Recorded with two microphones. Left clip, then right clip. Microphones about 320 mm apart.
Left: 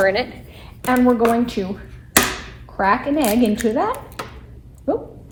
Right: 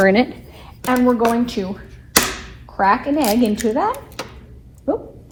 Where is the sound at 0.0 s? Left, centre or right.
Centre.